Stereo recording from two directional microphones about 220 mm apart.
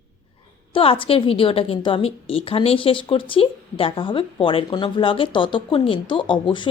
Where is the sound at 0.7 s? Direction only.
25° left (ahead or behind).